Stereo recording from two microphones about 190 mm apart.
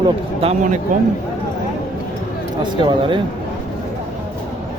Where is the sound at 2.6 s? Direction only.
25° right (ahead or behind).